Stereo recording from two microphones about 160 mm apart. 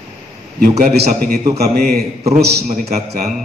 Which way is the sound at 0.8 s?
75° right (ahead or behind).